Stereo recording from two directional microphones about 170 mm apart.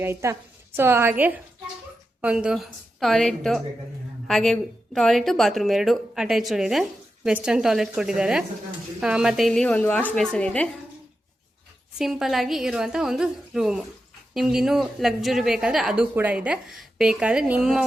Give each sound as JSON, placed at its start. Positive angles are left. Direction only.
{"t": 0.0, "sound": "a woman's voice", "side_deg": -15}
{"t": 11.9, "sound": "a woman's voice", "side_deg": 0}